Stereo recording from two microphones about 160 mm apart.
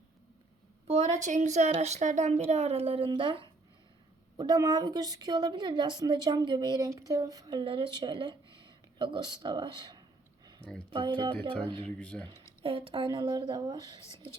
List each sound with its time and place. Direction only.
0.9 s a woman's voice: 45° right (ahead or behind); by 10.0 s 25° right (ahead or behind)
10.6 s speech: 90° right
10.9 s a woman's voice: 30° right (ahead or behind)
11.9 s speech: 5° left (ahead or behind)
12.6 s a woman's voice: 35° right (ahead or behind)